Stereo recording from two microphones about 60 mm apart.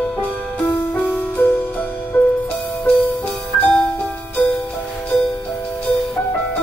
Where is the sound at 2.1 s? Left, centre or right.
Left.